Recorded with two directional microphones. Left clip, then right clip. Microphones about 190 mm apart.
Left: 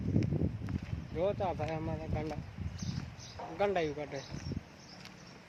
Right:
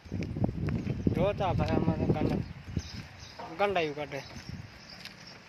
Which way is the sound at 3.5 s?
5° right (ahead or behind).